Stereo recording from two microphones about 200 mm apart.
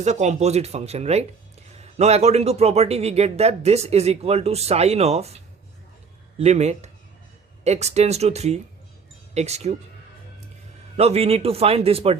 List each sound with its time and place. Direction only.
0.0 s a man's voice: 35° right (ahead or behind)
6.4 s a man's voice: 35° right (ahead or behind)
10.9 s a man's voice: 30° right (ahead or behind)